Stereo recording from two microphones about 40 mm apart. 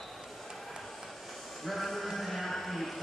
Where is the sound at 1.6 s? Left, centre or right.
Centre.